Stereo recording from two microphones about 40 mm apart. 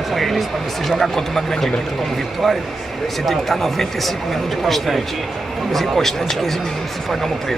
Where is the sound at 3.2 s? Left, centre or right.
Centre.